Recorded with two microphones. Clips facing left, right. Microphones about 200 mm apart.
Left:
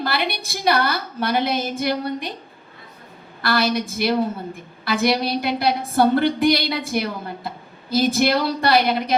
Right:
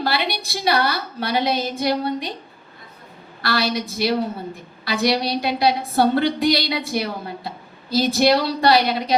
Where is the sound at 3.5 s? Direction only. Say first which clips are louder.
Left 2 dB; 50° left (ahead or behind).